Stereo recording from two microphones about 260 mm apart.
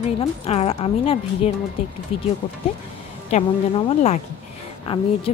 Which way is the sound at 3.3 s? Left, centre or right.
Left.